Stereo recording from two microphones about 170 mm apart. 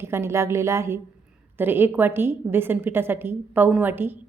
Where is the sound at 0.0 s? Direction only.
15° right (ahead or behind).